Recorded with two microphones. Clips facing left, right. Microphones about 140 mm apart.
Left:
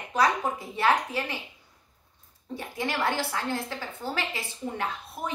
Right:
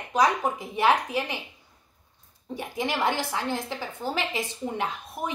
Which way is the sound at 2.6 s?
15° right (ahead or behind).